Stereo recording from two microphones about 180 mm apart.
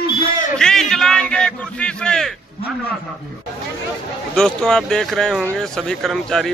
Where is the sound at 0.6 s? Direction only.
5° left (ahead or behind).